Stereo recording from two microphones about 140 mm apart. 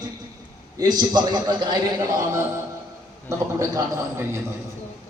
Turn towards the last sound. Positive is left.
turn(degrees=-20)  # may be behind; listen again after turning